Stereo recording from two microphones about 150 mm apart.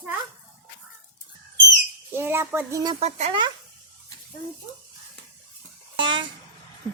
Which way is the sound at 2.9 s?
45° right (ahead or behind).